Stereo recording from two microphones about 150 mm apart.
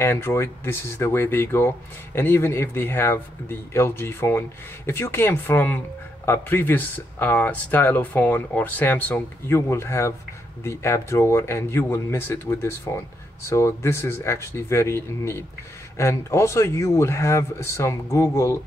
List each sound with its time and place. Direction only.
0.0 s speech: 15° left (ahead or behind)